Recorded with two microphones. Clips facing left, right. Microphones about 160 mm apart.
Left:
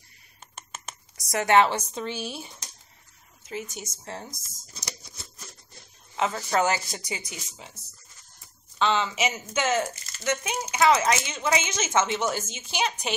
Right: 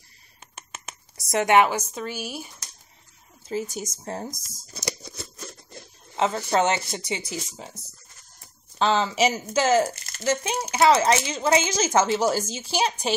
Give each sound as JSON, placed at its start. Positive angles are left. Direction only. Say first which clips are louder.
{"t": 1.1, "sound": "speech", "louder": "right 2 dB", "side_deg": -25}
{"t": 3.4, "sound": "speech", "louder": "right 6 dB", "side_deg": -35}
{"t": 4.4, "sound": "a sound", "louder": "right 6 dB", "side_deg": -70}
{"t": 6.1, "sound": "speech", "louder": "right 3 dB", "side_deg": -30}
{"t": 9.9, "sound": "a sound", "louder": "right 3 dB", "side_deg": -60}
{"t": 10.2, "sound": "speech", "louder": "right 3 dB", "side_deg": -30}